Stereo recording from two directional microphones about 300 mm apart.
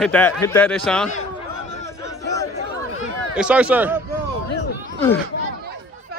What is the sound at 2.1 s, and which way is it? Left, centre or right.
Chatter, centre.